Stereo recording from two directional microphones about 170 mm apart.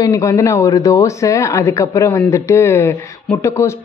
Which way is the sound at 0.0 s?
20° left (ahead or behind).